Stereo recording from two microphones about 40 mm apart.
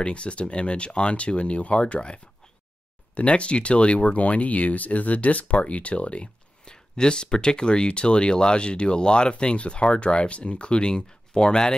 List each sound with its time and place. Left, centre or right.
0.0 s speech: left
6.6 s speech: centre